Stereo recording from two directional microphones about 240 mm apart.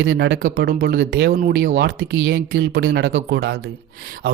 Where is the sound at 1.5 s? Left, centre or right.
Right.